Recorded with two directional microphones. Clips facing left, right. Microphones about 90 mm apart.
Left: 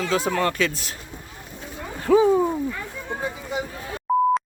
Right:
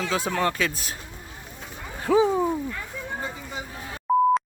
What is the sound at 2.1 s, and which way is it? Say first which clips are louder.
Speech: left 3 dB; centre (ahead or behind).